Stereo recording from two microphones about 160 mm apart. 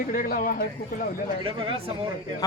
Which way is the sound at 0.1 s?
65° left (ahead or behind).